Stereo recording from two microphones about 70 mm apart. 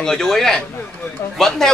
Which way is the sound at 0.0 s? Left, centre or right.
Centre.